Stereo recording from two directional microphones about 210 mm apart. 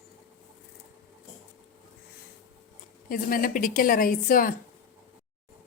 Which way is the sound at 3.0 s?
40° left (ahead or behind).